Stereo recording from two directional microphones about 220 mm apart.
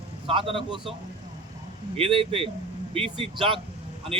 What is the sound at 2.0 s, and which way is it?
A man's voice, 25° right (ahead or behind).